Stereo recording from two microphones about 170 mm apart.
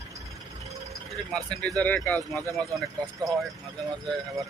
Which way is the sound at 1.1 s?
5° left (ahead or behind).